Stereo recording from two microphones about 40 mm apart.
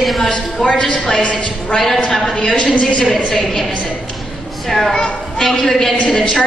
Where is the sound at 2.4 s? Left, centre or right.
Left.